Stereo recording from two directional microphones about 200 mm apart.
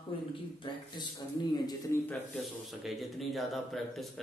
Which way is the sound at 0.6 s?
20° left (ahead or behind).